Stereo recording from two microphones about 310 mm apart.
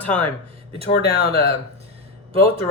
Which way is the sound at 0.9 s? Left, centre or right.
Left.